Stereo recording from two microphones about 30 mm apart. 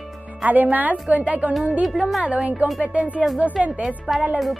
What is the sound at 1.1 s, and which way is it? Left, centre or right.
Speech, right.